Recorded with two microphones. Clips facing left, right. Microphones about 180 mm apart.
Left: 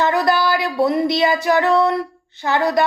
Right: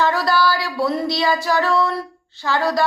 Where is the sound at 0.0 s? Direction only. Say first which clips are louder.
Left 1 dB; 20° left (ahead or behind).